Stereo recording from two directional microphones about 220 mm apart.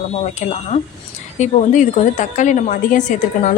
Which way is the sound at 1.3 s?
35° left (ahead or behind).